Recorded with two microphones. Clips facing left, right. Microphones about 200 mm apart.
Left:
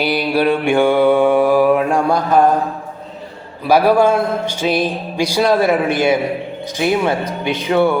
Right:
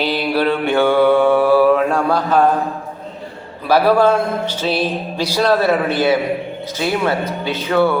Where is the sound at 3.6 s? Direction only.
10° left (ahead or behind).